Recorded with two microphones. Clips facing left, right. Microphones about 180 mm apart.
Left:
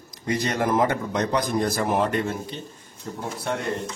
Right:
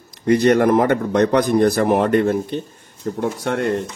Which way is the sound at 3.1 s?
75° right (ahead or behind).